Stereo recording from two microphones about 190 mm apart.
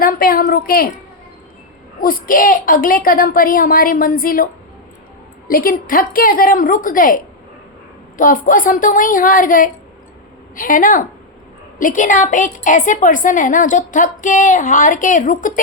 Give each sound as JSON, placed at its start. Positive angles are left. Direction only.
{"t": 0.0, "sound": "a sound", "side_deg": 50}
{"t": 2.0, "sound": "a woman's voice", "side_deg": 45}
{"t": 5.5, "sound": "a woman's voice", "side_deg": 50}
{"t": 8.2, "sound": "a woman's voice", "side_deg": 45}